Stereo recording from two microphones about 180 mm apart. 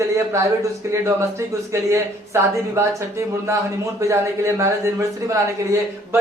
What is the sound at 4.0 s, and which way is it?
A man's voice, 15° right (ahead or behind).